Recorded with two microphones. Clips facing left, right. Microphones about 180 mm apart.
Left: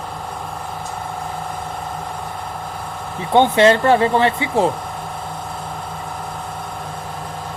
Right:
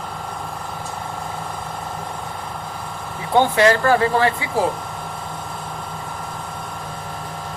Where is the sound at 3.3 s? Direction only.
25° left (ahead or behind).